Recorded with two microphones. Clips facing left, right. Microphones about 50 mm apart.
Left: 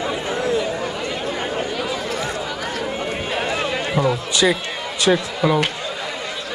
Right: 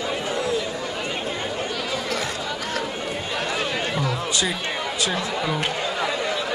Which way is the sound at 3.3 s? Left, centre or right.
Left.